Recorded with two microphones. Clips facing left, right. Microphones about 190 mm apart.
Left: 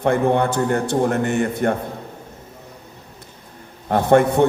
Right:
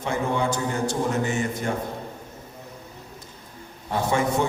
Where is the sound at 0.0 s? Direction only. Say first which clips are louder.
Left 8 dB; 60° left (ahead or behind).